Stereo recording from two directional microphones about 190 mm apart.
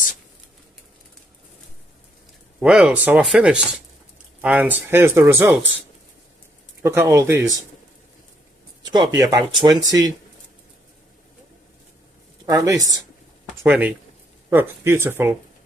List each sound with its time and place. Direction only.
2.6 s speech: 5° right (ahead or behind)
6.8 s speech: 15° right (ahead or behind)
8.8 s speech: 20° right (ahead or behind)
12.4 s speech: 20° right (ahead or behind)